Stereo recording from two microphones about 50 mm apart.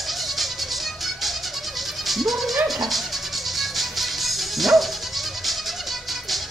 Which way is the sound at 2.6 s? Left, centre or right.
Centre.